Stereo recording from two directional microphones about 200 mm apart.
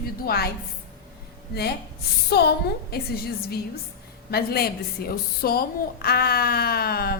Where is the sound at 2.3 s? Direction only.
55° left (ahead or behind).